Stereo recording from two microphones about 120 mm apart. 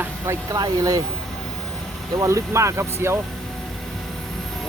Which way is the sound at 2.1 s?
25° right (ahead or behind).